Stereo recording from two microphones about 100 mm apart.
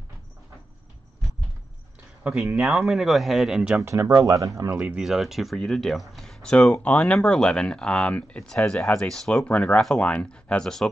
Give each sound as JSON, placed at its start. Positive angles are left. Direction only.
{"t": 2.2, "sound": "speech", "side_deg": -10}
{"t": 3.8, "sound": "speech", "side_deg": -30}
{"t": 4.7, "sound": "speech", "side_deg": -10}